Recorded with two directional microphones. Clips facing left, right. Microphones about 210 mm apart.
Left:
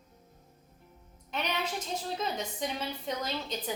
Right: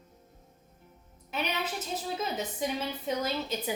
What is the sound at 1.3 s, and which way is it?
A woman's voice, 5° right (ahead or behind).